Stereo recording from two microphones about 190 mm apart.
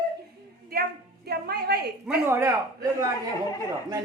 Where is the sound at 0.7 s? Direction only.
55° right (ahead or behind).